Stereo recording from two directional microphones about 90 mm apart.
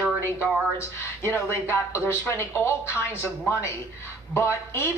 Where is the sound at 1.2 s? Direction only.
30° left (ahead or behind).